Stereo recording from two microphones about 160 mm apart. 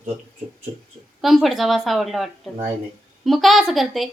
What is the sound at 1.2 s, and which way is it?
A woman's voice, centre (ahead or behind).